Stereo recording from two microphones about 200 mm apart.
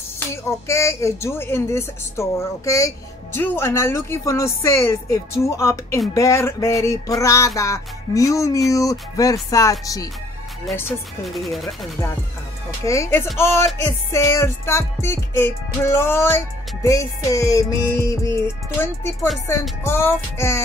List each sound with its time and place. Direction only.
0.5 s music: 15° left (ahead or behind)
10.9 s speech: centre (ahead or behind)
12.8 s music: 15° left (ahead or behind)